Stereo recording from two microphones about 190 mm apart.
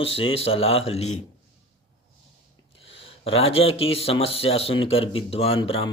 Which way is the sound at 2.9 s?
30° left (ahead or behind).